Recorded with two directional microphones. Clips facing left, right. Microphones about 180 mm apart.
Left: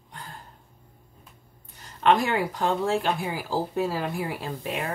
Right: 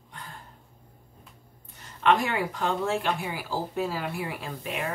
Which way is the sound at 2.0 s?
35° left (ahead or behind).